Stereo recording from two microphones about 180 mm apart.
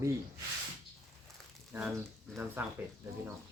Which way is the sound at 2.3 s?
10° right (ahead or behind).